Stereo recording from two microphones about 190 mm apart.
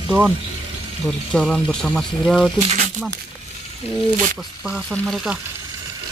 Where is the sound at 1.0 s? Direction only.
Centre (ahead or behind).